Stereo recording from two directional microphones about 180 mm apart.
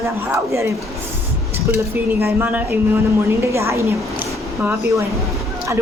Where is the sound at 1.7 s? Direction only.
10° right (ahead or behind).